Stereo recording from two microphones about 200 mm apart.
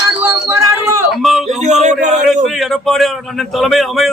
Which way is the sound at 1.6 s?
35° right (ahead or behind).